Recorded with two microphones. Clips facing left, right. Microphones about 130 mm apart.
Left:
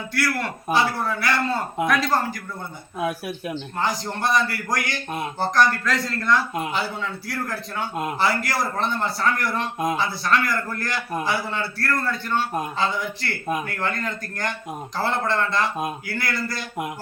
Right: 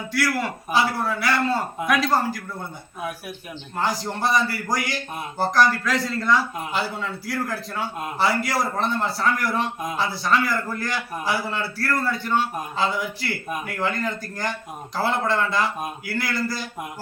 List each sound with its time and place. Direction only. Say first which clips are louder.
0.1 s a man's voice: right 2 dB; 5° right (ahead or behind)
3.0 s speech: left 6 dB; 90° left
3.8 s a man's voice: right 2 dB; centre (ahead or behind)